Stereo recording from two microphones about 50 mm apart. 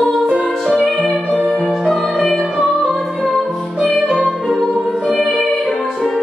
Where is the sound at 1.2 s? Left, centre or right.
Left.